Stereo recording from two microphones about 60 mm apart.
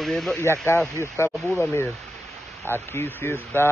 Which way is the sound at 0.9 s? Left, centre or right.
Left.